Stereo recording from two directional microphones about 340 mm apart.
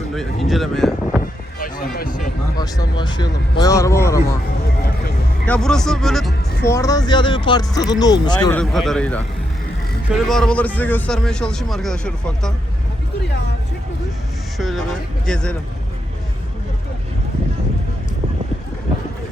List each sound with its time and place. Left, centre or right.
0.1 s a man's voice: centre
1.5 s a sound: left
2.6 s speech: centre
5.5 s a man's voice: centre
14.6 s a man's voice: centre